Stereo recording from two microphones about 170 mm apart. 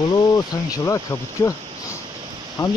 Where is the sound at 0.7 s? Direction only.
20° left (ahead or behind).